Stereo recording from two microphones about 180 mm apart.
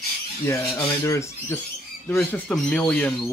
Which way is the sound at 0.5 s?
15° left (ahead or behind).